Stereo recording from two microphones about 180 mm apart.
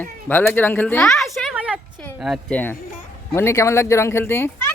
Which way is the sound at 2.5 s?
10° left (ahead or behind).